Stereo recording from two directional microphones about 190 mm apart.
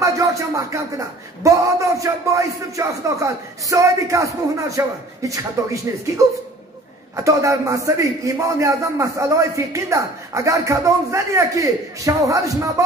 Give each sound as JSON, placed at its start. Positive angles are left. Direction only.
{"t": 0.0, "sound": "speech", "side_deg": -15}
{"t": 7.2, "sound": "speech", "side_deg": -15}